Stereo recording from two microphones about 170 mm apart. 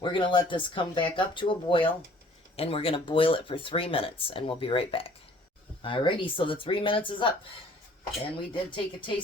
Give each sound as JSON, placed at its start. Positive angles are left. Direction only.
{"t": 0.0, "sound": "speech", "side_deg": 30}